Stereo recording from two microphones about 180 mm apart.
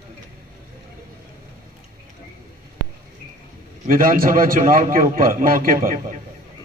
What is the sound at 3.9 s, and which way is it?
A man's voice, 55° right (ahead or behind).